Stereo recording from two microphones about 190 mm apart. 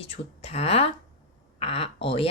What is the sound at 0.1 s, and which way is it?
Speech, 30° left (ahead or behind).